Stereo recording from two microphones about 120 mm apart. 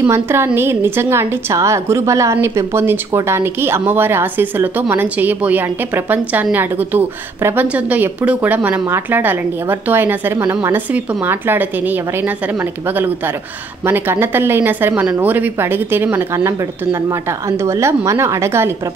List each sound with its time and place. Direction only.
0.0 s a woman's voice: 20° right (ahead or behind)